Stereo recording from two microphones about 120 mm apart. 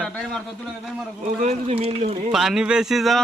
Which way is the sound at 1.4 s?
65° right (ahead or behind).